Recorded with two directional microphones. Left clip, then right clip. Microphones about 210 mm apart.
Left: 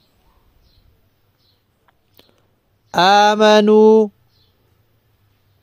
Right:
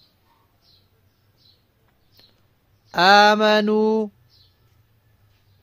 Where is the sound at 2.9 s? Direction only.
35° left (ahead or behind).